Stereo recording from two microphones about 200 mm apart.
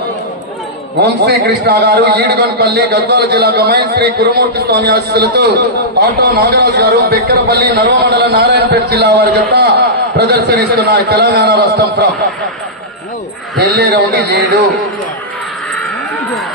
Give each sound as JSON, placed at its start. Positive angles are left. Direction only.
{"t": 1.0, "sound": "a man's voice", "side_deg": -55}
{"t": 13.6, "sound": "a man's voice", "side_deg": -55}